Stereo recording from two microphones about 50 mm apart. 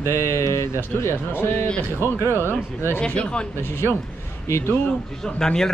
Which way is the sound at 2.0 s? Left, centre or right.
Left.